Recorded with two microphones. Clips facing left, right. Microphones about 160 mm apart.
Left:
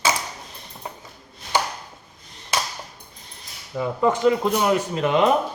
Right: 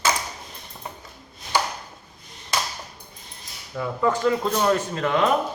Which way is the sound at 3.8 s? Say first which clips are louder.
Left 3 dB; 20° left (ahead or behind).